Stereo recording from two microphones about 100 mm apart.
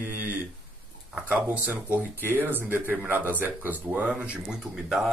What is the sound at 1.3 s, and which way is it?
Speech, 15° right (ahead or behind).